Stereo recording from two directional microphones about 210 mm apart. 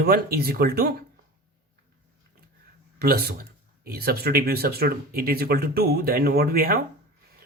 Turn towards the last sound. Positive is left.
turn(degrees=-45)  # may be behind; listen again after turning